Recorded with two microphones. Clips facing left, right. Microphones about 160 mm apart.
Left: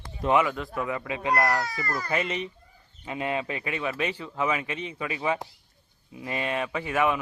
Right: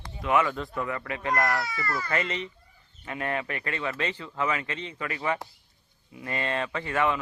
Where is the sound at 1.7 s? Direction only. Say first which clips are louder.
Even; 40° left (ahead or behind).